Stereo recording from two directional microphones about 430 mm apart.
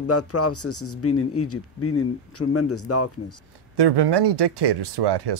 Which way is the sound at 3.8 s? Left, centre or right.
Right.